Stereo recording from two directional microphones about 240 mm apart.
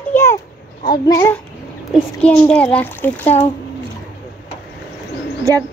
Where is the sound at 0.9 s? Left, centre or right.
Centre.